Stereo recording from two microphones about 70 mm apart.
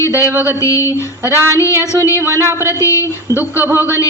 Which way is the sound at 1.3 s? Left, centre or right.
Right.